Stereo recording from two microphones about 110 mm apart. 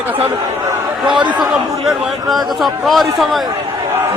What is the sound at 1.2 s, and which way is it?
Speech, 45° right (ahead or behind).